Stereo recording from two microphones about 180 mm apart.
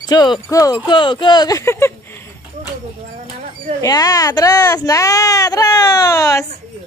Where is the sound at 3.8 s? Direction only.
20° left (ahead or behind).